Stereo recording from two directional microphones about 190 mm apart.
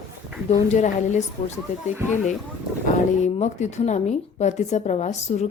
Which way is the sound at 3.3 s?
35° left (ahead or behind).